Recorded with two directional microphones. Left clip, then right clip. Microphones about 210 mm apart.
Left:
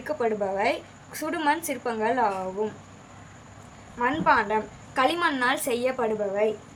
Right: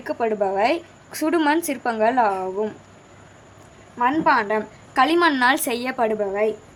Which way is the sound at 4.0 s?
35° right (ahead or behind).